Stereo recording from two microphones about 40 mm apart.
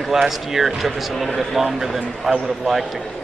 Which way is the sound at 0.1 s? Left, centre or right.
Centre.